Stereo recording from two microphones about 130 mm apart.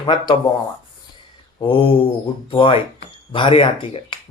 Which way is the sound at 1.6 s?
40° left (ahead or behind).